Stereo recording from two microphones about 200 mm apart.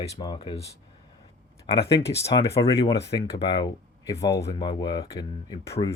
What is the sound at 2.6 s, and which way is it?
Speech, 20° left (ahead or behind).